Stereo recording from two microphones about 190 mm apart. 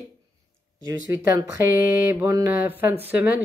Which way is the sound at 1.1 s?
15° right (ahead or behind).